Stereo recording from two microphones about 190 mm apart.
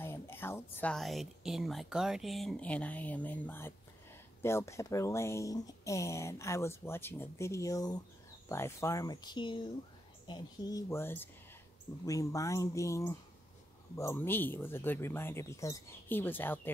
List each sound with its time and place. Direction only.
0.0 s a woman's voice: 10° left (ahead or behind)